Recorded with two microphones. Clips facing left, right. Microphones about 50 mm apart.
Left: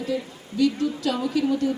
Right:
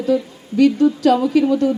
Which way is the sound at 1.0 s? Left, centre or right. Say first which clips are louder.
Right 11 dB; right.